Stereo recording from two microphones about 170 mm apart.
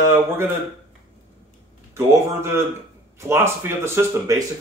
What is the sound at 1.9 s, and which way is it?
Speech, 15° right (ahead or behind).